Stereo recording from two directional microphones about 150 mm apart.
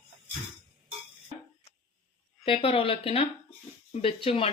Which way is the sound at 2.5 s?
40° left (ahead or behind).